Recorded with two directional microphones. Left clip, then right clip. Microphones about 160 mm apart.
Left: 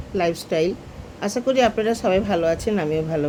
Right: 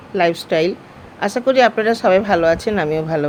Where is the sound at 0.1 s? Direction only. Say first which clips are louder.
Right 6 dB; 20° right (ahead or behind).